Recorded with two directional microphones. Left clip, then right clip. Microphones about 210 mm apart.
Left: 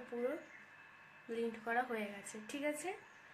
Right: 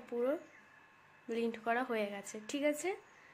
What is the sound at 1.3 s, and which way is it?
Speech, 50° right (ahead or behind).